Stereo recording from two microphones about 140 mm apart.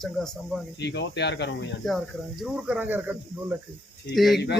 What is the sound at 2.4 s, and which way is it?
Speech, 5° right (ahead or behind).